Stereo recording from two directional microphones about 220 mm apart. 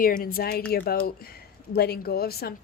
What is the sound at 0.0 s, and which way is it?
Speech, 40° left (ahead or behind).